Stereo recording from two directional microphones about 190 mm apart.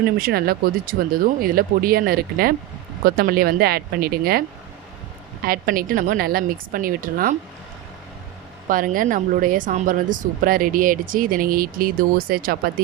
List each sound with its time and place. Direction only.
0.0 s speech: 50° right (ahead or behind)
8.7 s speech: 45° right (ahead or behind)